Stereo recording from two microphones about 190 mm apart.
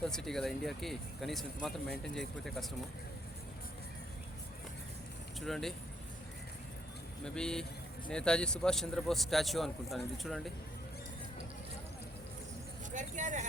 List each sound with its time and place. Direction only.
0.0 s speech: 5° left (ahead or behind)
5.5 s speech: centre (ahead or behind)
7.3 s speech: 5° left (ahead or behind)
12.9 s speech: 40° right (ahead or behind)